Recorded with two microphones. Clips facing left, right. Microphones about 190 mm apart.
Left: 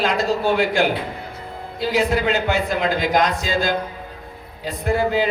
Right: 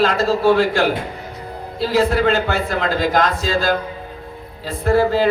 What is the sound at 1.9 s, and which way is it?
Speech, 15° left (ahead or behind).